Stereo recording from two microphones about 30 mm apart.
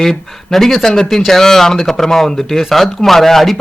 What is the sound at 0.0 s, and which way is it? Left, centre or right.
A man's voice, centre.